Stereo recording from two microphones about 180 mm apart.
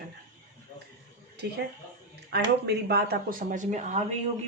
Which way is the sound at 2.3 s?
65° right (ahead or behind).